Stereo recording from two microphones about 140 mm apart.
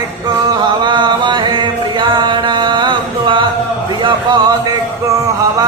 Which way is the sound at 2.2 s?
35° right (ahead or behind).